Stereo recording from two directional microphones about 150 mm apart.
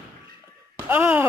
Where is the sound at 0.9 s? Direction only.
15° right (ahead or behind).